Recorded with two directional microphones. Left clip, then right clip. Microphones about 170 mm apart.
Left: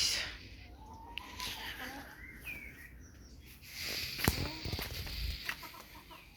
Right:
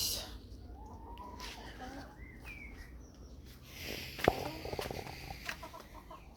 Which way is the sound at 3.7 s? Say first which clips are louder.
Left 5 dB; 25° right (ahead or behind).